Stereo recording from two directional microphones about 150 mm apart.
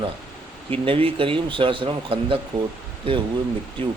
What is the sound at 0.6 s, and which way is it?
Speech, 35° right (ahead or behind).